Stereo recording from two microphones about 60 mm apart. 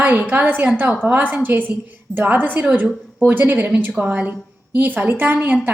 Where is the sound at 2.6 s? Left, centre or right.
Centre.